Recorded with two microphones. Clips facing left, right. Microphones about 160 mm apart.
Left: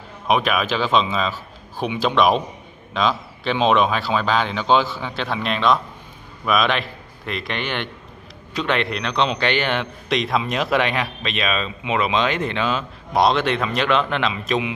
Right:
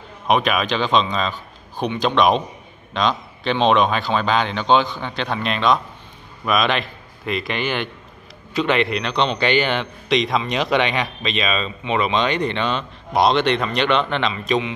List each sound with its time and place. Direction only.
0.3 s a man's voice: centre (ahead or behind)